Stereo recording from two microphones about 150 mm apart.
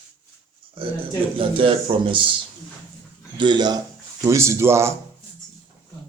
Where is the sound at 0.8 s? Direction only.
35° right (ahead or behind).